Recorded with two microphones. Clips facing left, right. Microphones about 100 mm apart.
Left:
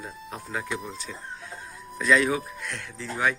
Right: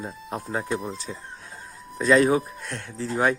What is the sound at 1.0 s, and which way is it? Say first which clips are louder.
Chicken: right 1 dB; 35° right (ahead or behind).